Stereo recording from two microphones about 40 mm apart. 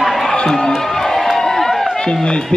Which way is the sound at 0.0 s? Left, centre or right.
Centre.